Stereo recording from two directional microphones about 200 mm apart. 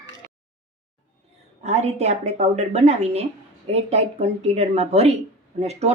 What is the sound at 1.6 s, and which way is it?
Speech, 35° right (ahead or behind).